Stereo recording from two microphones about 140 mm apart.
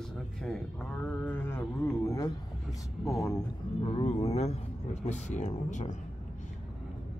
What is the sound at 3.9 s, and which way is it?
Speech, 40° left (ahead or behind).